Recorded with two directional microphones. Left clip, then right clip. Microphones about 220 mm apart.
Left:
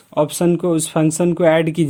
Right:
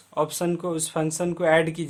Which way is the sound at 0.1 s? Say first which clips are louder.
Left 8 dB; 30° left (ahead or behind).